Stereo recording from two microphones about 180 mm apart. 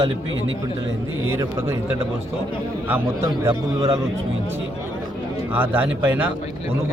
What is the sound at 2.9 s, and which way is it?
Speech, 10° right (ahead or behind).